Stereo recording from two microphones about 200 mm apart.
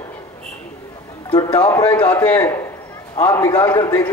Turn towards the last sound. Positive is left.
turn(degrees=20)  # may be behind; listen again after turning